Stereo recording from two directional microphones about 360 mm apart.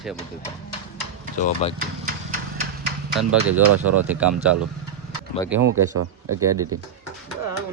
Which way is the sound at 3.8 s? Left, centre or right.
Right.